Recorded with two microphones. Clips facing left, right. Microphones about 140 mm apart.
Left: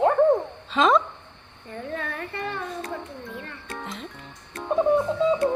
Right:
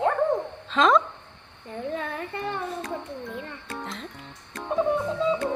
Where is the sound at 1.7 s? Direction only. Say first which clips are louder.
Right 1 dB; 20° right (ahead or behind).